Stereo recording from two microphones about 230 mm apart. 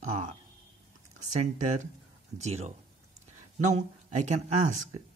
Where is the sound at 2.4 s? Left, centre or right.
Right.